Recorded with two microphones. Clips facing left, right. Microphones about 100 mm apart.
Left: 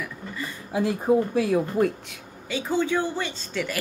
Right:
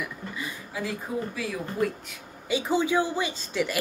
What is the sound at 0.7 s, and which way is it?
Speech, 50° left (ahead or behind).